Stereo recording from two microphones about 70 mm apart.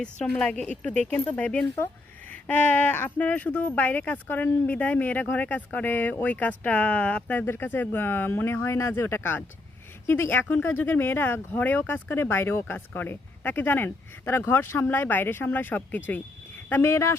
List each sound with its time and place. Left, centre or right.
0.0 s a woman's voice: centre
0.9 s speech: left
16.9 s speech: left